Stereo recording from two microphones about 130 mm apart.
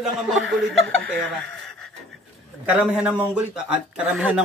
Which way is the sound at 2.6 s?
10° right (ahead or behind).